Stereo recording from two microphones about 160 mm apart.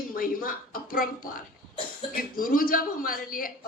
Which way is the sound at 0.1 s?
60° left (ahead or behind).